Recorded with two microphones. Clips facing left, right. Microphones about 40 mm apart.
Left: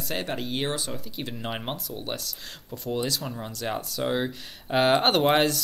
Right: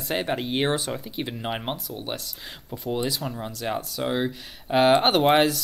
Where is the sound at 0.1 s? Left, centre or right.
Centre.